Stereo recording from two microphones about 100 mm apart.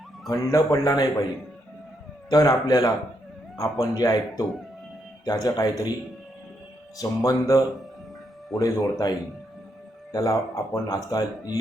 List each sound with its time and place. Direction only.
0.3 s speech: 35° left (ahead or behind)
2.3 s speech: 40° left (ahead or behind)
7.0 s speech: 35° left (ahead or behind)